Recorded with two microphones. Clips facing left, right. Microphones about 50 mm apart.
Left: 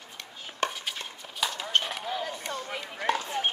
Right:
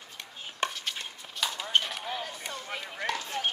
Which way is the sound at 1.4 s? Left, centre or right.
Centre.